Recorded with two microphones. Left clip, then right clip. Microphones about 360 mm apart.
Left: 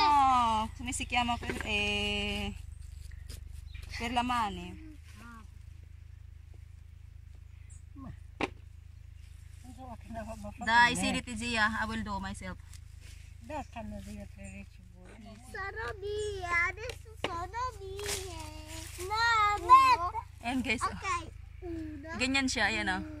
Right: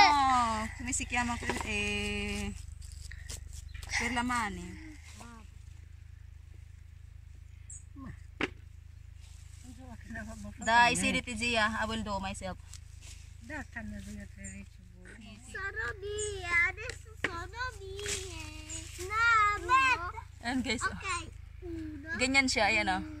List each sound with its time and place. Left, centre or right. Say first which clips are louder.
0.1 s speech: left 2 dB; centre
4.0 s speech: left 2 dB; centre
9.8 s speech: left 2 dB; centre
13.5 s speech: left 2 dB; centre
15.0 s a sound: right 1 dB; centre
20.3 s speech: right 2 dB; centre
21.0 s speech: left 2 dB; centre
22.2 s speech: right 2 dB; centre